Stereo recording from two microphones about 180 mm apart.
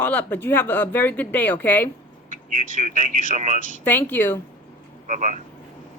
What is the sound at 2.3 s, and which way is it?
Speech, 45° right (ahead or behind).